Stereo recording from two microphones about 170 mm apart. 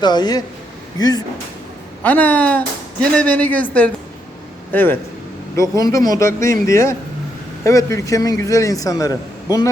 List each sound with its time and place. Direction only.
0.0 s a man's voice: 25° left (ahead or behind)
2.0 s a man's voice: 10° left (ahead or behind)